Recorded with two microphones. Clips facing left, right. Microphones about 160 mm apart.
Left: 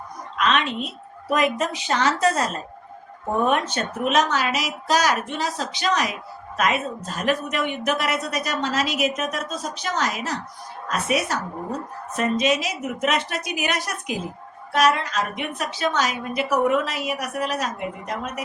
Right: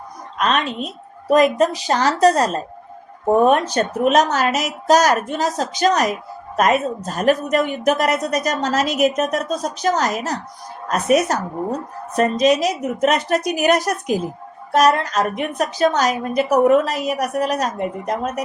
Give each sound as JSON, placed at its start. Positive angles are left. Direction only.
{"t": 0.3, "sound": "a woman's voice", "side_deg": -40}